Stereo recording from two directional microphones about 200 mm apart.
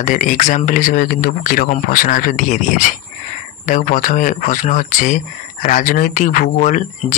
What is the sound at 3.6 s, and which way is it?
Speech, 40° left (ahead or behind).